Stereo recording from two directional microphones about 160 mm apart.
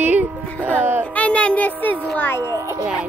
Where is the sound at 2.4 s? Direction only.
20° right (ahead or behind).